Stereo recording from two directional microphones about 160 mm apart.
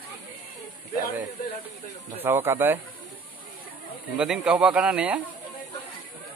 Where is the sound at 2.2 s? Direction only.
15° right (ahead or behind).